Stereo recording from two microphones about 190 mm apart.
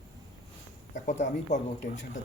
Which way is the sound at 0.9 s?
40° left (ahead or behind).